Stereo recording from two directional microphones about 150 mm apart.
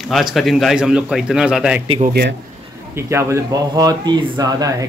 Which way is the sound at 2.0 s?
90° right.